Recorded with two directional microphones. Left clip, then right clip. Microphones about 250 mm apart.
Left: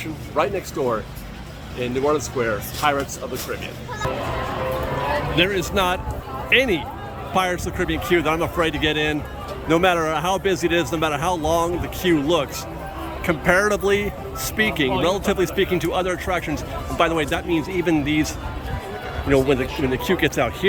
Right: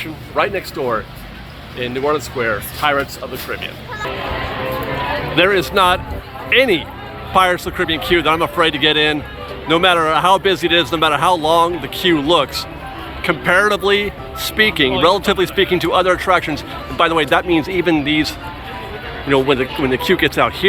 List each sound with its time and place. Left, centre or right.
0.3 s speech: centre
5.4 s speech: centre